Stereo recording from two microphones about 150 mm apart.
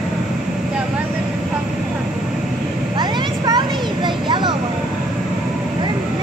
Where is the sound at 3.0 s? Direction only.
30° right (ahead or behind).